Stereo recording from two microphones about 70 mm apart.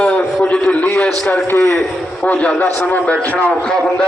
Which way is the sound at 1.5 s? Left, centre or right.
Left.